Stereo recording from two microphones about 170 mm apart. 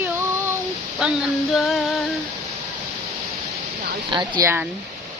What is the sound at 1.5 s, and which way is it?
Music, centre (ahead or behind).